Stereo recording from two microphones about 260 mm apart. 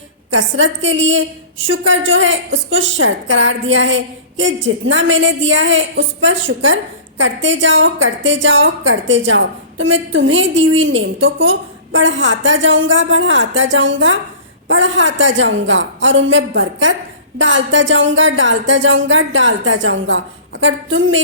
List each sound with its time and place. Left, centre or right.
0.3 s a woman's voice: right